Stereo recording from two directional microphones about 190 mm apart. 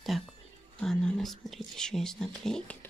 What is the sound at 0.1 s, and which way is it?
Whispering, centre (ahead or behind).